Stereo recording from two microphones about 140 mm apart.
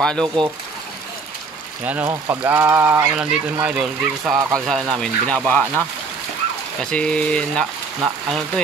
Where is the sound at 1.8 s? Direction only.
10° right (ahead or behind); by 5.8 s 10° left (ahead or behind).